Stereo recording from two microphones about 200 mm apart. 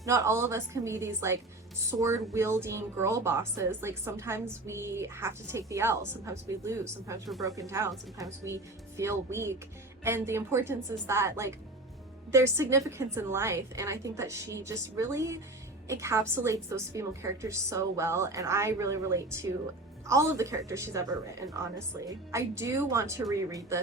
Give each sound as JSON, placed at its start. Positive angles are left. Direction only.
{"t": 0.0, "sound": "a woman's voice", "side_deg": -15}